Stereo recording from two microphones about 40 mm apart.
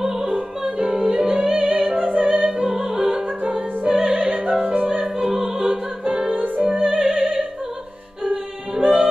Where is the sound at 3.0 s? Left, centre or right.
Right.